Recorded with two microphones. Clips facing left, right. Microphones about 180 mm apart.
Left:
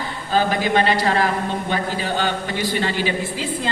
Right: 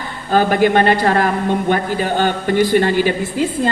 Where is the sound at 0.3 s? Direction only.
50° right (ahead or behind).